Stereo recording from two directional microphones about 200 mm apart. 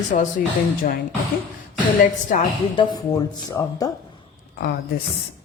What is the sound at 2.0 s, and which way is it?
Speech, 40° left (ahead or behind).